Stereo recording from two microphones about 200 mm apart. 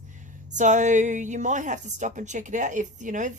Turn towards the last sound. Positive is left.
turn(degrees=-40)  # may be behind; listen again after turning